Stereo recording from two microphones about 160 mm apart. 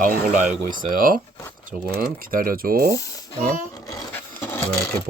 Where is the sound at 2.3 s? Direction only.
60° right (ahead or behind).